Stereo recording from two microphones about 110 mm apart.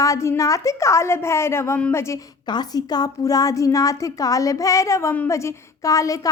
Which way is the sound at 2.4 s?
40° left (ahead or behind).